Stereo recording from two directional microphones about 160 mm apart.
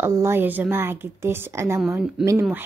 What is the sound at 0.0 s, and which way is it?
Speech, 15° right (ahead or behind).